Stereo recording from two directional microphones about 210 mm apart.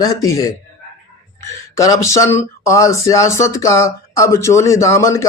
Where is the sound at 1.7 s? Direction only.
15° left (ahead or behind).